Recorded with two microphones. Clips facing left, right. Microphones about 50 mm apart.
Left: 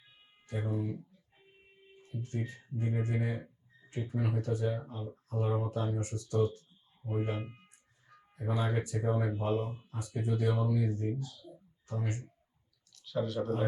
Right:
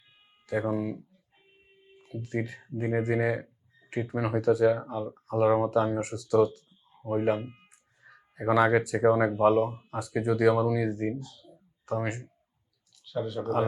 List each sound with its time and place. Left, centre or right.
0.5 s speech: right
2.0 s speech: right
12.9 s a sound: centre
13.4 s speech: right